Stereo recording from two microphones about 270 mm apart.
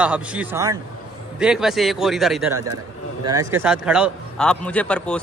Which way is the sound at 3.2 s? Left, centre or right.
Centre.